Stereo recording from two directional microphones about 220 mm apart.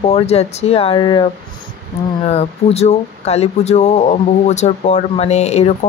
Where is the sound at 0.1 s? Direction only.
30° left (ahead or behind).